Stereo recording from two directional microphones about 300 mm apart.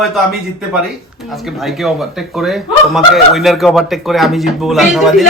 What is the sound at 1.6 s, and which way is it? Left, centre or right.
Speech, centre.